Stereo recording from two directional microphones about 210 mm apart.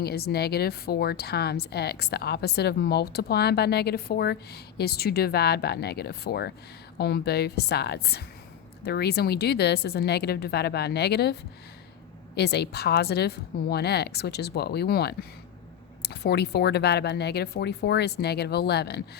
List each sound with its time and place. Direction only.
0.0 s a woman's voice: 50° left (ahead or behind)